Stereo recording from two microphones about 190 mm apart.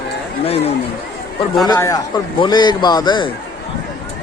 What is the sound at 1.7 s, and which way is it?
Speech, 20° left (ahead or behind).